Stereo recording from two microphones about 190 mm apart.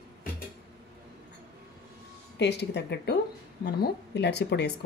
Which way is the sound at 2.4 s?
65° left (ahead or behind).